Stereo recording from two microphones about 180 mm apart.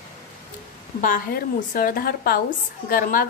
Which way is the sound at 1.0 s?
50° left (ahead or behind).